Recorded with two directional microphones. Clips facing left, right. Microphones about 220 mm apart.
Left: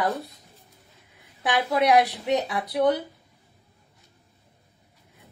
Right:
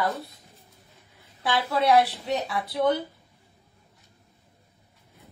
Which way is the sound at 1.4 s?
20° left (ahead or behind).